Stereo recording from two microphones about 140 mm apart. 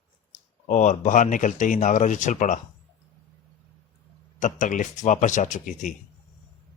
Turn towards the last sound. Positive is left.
turn(degrees=65)  # may be behind; listen again after turning